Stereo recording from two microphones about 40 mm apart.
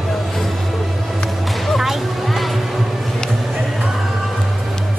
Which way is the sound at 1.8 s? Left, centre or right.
Centre.